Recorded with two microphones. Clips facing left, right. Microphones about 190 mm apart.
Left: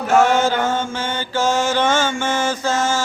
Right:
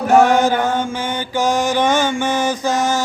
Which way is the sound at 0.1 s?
15° right (ahead or behind).